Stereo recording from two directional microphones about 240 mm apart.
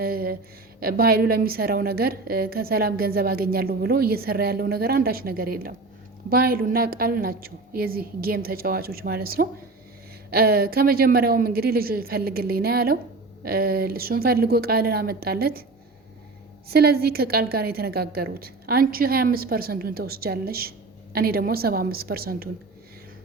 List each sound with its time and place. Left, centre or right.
0.0 s a sound: right
0.8 s a woman's voice: right
16.6 s a woman's voice: right